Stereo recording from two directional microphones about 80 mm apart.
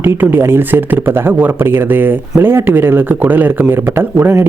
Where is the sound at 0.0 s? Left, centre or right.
Right.